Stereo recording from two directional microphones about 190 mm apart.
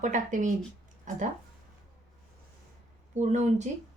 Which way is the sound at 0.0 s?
40° right (ahead or behind).